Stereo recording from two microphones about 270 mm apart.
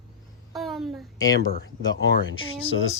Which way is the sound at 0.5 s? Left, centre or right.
Centre.